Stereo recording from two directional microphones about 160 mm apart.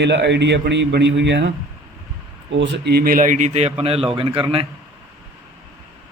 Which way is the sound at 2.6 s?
90° right.